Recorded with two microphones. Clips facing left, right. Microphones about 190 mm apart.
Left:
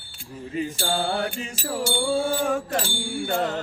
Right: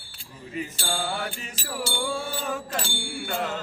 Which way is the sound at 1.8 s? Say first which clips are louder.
Left 7 dB; 55° left (ahead or behind).